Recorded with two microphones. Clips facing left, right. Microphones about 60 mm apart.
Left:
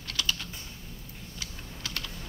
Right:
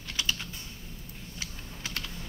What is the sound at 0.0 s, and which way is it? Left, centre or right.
Typing, centre.